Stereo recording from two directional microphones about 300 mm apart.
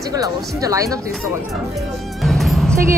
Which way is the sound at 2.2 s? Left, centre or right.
Centre.